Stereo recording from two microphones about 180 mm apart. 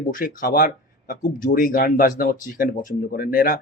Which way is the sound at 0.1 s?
50° left (ahead or behind).